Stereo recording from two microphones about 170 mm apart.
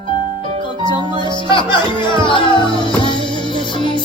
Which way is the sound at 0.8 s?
25° right (ahead or behind).